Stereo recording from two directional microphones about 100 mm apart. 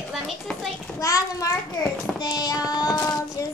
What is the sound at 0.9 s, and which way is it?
Speech, 35° left (ahead or behind).